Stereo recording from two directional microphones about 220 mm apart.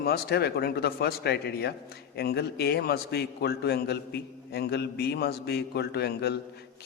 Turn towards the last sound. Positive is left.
turn(degrees=50)  # may be behind; listen again after turning